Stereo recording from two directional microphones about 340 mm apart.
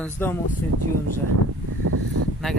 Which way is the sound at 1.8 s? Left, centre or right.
Right.